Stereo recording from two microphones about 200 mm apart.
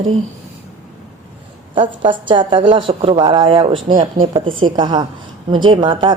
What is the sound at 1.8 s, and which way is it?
Speech, 25° right (ahead or behind).